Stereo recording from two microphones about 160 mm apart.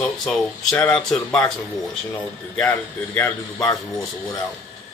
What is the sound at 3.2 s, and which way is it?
Speech, 15° left (ahead or behind).